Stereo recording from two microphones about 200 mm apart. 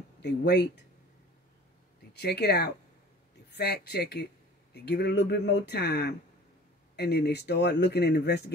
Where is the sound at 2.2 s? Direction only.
55° left (ahead or behind).